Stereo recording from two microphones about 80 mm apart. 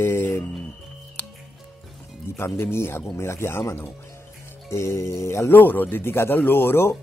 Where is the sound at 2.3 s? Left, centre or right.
Left.